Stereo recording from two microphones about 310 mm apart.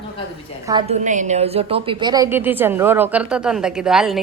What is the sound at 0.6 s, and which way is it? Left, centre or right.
A woman's voice, centre.